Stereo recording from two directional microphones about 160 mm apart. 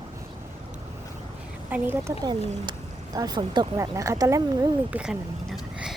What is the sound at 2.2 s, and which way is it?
Speech, 30° right (ahead or behind).